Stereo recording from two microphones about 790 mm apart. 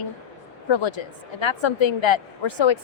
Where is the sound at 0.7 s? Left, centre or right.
Left.